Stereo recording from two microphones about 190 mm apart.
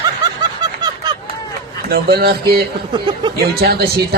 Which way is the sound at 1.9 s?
55° right (ahead or behind).